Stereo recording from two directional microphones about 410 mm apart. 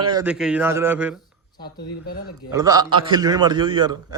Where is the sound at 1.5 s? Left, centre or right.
Centre.